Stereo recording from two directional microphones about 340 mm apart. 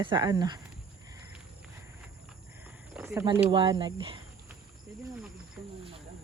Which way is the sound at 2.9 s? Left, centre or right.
Centre.